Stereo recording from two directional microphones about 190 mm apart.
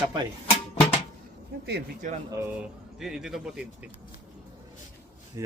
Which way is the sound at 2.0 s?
40° right (ahead or behind).